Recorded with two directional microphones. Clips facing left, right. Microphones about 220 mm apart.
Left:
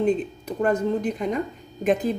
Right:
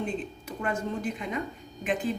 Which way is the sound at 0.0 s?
40° left (ahead or behind).